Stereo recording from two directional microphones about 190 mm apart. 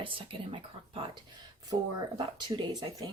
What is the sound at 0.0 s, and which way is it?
Speech, 30° right (ahead or behind).